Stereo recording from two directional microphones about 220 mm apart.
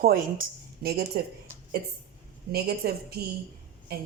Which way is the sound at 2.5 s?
45° right (ahead or behind).